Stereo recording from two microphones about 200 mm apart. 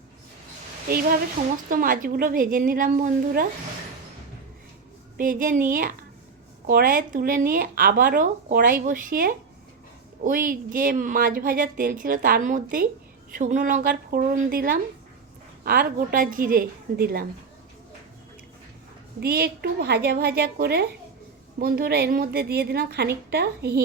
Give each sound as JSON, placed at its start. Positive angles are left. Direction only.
{"t": 1.7, "sound": "speech", "side_deg": -45}
{"t": 5.1, "sound": "speech", "side_deg": -45}
{"t": 19.2, "sound": "speech", "side_deg": -50}